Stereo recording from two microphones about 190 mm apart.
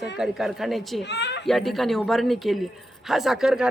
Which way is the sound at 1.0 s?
65° left (ahead or behind).